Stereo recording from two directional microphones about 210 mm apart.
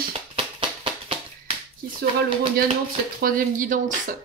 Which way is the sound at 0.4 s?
25° right (ahead or behind).